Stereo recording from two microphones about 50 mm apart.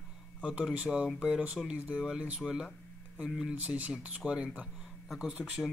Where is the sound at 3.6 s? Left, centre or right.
Right.